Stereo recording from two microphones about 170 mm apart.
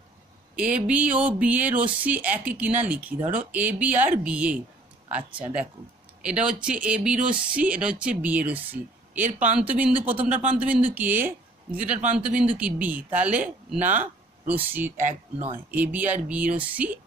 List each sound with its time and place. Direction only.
0.6 s speech: 5° right (ahead or behind)
6.2 s speech: 5° right (ahead or behind)
13.7 s a sound: 45° right (ahead or behind)
14.5 s speech: 10° right (ahead or behind)
15.0 s speech: 40° right (ahead or behind)
15.5 s speech: 10° right (ahead or behind)